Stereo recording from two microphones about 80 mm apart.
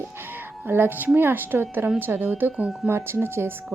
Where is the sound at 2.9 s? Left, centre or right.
Right.